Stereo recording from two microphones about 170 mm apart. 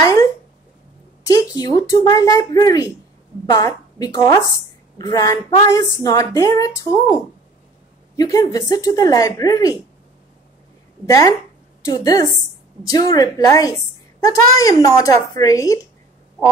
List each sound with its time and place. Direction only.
0.0 s a sound: 15° left (ahead or behind)
1.2 s a woman's voice: 20° left (ahead or behind)
8.2 s a woman's voice: 20° left (ahead or behind)
11.1 s a woman's voice: 20° left (ahead or behind)